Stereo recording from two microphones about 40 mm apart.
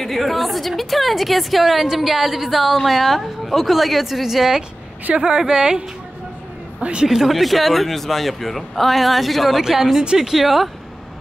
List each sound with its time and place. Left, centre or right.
0.0 s a woman's voice: centre
5.1 s a woman's voice: right
7.1 s a woman's voice: centre
9.6 s a woman's voice: centre